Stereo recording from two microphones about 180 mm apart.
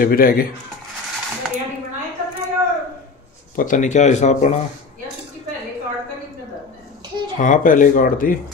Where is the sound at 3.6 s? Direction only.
45° left (ahead or behind).